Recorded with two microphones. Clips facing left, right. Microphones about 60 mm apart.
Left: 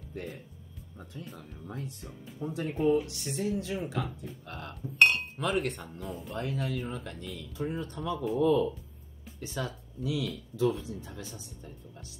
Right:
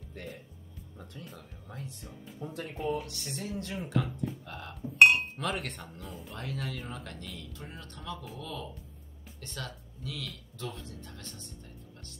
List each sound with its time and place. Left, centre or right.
0.1 s speech: centre
4.9 s speech: centre
5.4 s speech: centre